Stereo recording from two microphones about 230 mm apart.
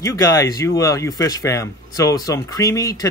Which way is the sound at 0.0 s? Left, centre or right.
Centre.